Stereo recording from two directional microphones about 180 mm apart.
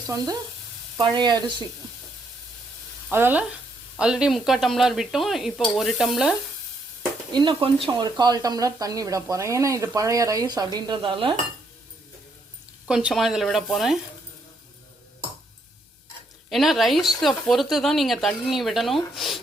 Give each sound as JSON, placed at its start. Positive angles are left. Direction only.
{"t": 1.1, "sound": "speech", "side_deg": -25}
{"t": 3.1, "sound": "speech", "side_deg": -10}
{"t": 7.3, "sound": "speech", "side_deg": -30}
{"t": 12.9, "sound": "speech", "side_deg": -5}
{"t": 16.5, "sound": "speech", "side_deg": 0}